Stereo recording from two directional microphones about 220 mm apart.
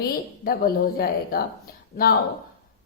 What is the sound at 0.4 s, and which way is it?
Speech, 40° left (ahead or behind).